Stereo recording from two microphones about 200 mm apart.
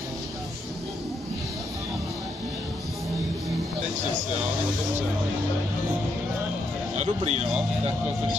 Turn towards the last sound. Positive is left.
turn(degrees=-30)  # may be behind; listen again after turning